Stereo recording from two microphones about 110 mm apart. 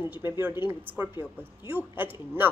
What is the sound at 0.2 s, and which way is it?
A woman's voice, 20° right (ahead or behind).